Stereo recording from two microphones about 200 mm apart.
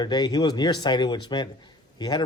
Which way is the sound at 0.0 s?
20° left (ahead or behind).